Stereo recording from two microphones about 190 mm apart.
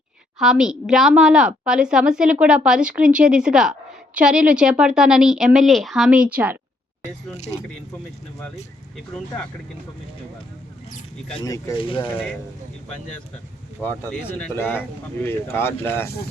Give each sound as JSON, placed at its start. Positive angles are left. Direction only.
{"t": 0.3, "sound": "a woman's voice", "side_deg": -5}
{"t": 9.0, "sound": "a woman's voice", "side_deg": 5}
{"t": 11.4, "sound": "speech", "side_deg": 20}
{"t": 13.8, "sound": "speech", "side_deg": 10}